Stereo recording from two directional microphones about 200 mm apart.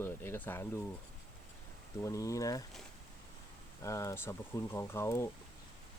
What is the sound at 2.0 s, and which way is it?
Speech, 15° left (ahead or behind).